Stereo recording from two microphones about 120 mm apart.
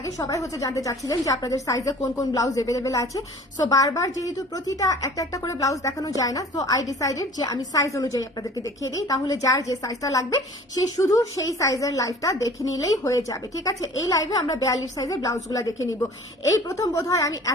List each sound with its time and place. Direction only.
0.2 s a woman's voice: 30° left (ahead or behind)